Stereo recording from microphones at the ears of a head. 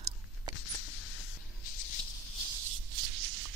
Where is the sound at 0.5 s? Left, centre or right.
Left.